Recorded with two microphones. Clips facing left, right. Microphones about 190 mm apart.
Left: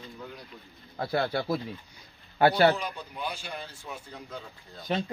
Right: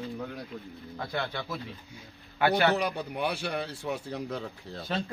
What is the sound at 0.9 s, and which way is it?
A man's voice, 35° left (ahead or behind).